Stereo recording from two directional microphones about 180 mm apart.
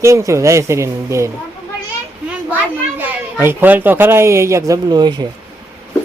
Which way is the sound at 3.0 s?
10° right (ahead or behind).